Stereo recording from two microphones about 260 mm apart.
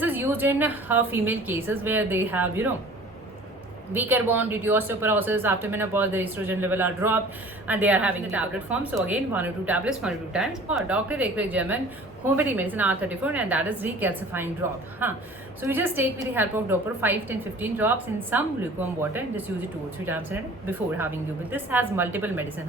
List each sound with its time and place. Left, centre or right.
0.0 s a woman's voice: centre
3.9 s a woman's voice: centre